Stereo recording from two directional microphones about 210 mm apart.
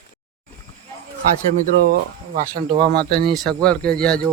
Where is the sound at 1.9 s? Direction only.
40° right (ahead or behind).